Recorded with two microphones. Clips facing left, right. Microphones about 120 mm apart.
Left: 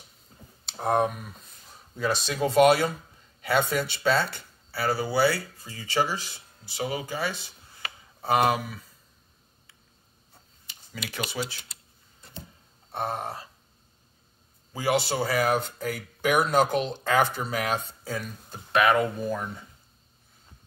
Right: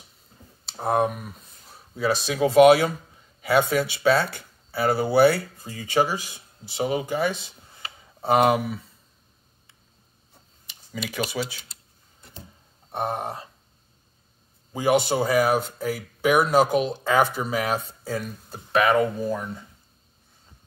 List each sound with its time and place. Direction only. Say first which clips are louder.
0.7 s speech: right 2 dB; centre (ahead or behind)
3.3 s a sound: right 4 dB; 10° right (ahead or behind)
3.7 s speech: right 4 dB; 10° right (ahead or behind)
4.6 s speech: right 5 dB; 20° right (ahead or behind)
6.8 s speech: right 6 dB; 25° right (ahead or behind)
11.1 s speech: right 4 dB; 10° right (ahead or behind)
12.9 s speech: right 3 dB; 15° right (ahead or behind)
14.7 s speech: right 5 dB; 20° right (ahead or behind); by 19.6 s centre (ahead or behind)